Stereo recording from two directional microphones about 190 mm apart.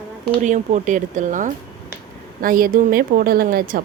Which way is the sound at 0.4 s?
40° right (ahead or behind).